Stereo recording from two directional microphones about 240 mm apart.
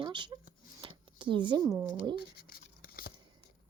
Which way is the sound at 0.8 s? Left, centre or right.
Right.